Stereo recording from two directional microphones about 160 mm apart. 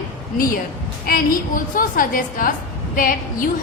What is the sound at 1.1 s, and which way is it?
A woman's voice, 60° left (ahead or behind).